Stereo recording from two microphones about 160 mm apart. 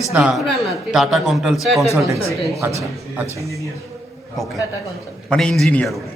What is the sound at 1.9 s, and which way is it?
Speech, 20° right (ahead or behind).